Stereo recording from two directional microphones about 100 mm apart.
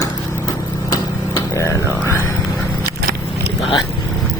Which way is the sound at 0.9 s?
35° left (ahead or behind).